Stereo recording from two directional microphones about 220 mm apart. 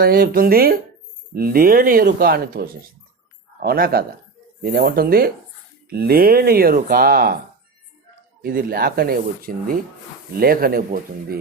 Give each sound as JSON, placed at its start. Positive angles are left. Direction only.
{"t": 0.0, "sound": "speech", "side_deg": -40}
{"t": 3.6, "sound": "speech", "side_deg": -45}
{"t": 8.4, "sound": "speech", "side_deg": -45}